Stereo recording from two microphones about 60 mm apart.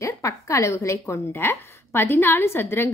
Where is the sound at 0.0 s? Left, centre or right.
Left.